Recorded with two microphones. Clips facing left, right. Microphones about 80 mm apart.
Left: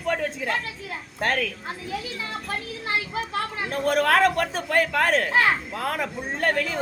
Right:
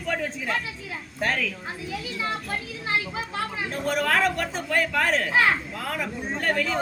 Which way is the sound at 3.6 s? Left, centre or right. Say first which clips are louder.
Left 4 dB; left.